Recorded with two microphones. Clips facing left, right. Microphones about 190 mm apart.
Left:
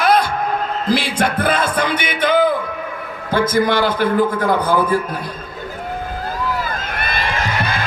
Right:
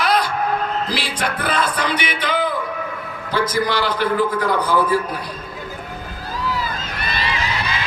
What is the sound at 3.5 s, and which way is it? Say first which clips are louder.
A man's voice: left 4 dB; 50° left (ahead or behind).